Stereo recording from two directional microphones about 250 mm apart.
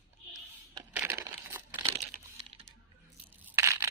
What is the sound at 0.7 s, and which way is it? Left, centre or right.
Crushing, centre.